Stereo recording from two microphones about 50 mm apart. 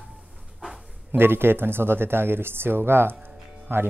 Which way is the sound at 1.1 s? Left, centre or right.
Right.